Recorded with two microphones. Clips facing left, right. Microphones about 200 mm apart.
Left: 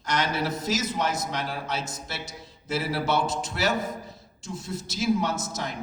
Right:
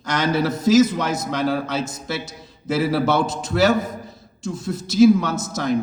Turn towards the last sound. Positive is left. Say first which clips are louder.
# right 5 dB
turn(degrees=-90)